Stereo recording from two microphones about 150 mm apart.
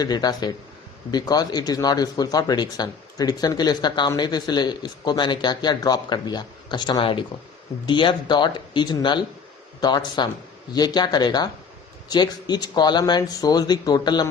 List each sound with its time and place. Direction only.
0.0 s speech: 25° left (ahead or behind)